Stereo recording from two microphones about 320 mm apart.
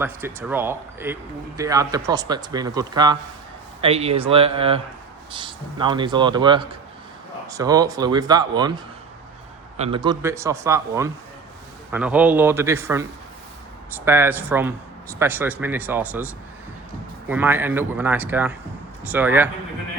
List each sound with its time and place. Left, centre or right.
0.0 s speech: centre